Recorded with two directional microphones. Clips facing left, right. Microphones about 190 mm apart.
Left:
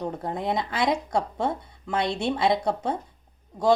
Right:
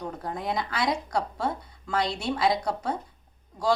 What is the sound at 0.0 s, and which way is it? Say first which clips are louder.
A woman's voice: left 4 dB; 25° left (ahead or behind).